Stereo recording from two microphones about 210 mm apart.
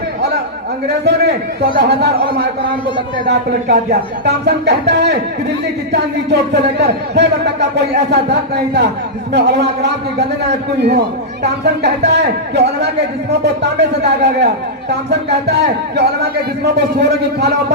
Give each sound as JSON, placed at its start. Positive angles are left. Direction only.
{"t": 0.9, "sound": "a man's voice", "side_deg": -55}
{"t": 4.3, "sound": "a man's voice", "side_deg": -50}